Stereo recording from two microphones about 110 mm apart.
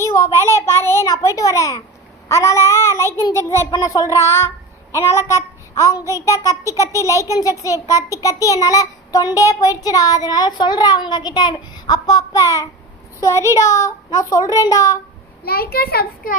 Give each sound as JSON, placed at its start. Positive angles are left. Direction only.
{"t": 0.0, "sound": "a child's voice", "side_deg": 25}
{"t": 3.7, "sound": "child singing", "side_deg": 30}
{"t": 6.9, "sound": "a child's voice", "side_deg": 30}
{"t": 7.3, "sound": "child singing", "side_deg": 30}